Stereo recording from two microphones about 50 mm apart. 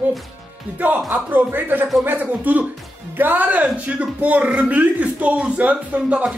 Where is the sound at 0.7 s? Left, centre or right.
Right.